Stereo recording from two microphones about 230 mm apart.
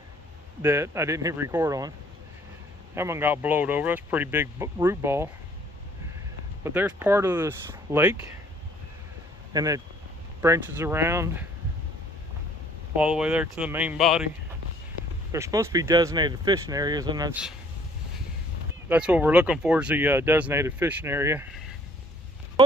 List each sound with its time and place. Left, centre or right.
0.6 s speech: centre
6.6 s speech: centre
9.5 s speech: centre
12.9 s speech: centre
15.3 s speech: centre
18.9 s speech: centre